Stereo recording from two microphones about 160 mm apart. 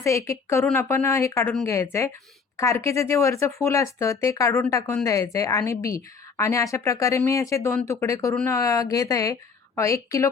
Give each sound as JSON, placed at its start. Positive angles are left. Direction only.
{"t": 0.0, "sound": "a woman's voice", "side_deg": 20}